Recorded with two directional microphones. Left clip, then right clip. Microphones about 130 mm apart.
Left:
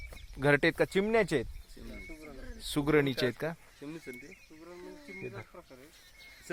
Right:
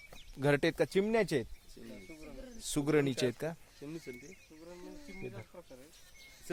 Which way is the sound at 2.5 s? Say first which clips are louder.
Left 3 dB; 10° right (ahead or behind).